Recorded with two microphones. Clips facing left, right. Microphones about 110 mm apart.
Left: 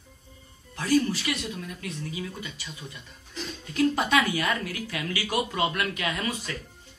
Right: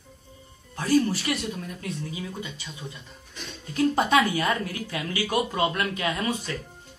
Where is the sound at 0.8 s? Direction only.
40° right (ahead or behind).